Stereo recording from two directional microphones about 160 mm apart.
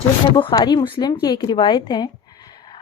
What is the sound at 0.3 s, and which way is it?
A woman's voice, 30° left (ahead or behind).